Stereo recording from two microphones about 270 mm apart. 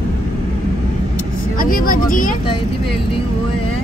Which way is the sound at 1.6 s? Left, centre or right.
Left.